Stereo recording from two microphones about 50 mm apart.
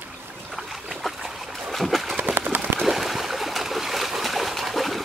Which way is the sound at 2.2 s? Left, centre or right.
Right.